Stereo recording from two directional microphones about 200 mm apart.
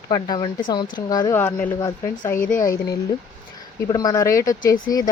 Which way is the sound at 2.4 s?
40° left (ahead or behind).